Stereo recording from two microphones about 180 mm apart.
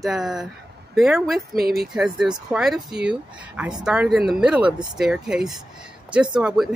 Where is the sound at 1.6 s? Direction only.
60° right (ahead or behind).